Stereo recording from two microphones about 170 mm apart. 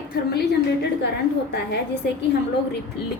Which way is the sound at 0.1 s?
70° left (ahead or behind).